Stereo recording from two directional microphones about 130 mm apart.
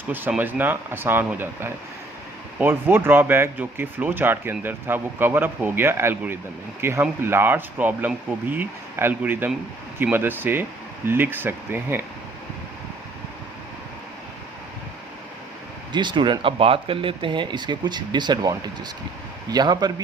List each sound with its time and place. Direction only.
0.1 s speech: 15° right (ahead or behind)
15.9 s speech: 35° right (ahead or behind)